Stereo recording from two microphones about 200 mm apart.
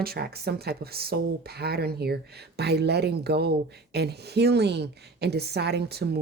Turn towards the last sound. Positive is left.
turn(degrees=-55)  # may be behind; listen again after turning